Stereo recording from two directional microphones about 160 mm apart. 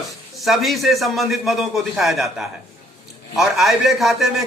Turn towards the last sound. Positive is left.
turn(degrees=0)  # may be behind; listen again after turning